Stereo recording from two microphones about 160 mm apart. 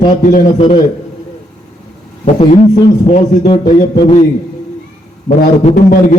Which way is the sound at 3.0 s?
45° left (ahead or behind).